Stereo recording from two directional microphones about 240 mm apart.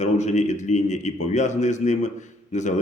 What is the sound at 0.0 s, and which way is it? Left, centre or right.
A man's voice, left.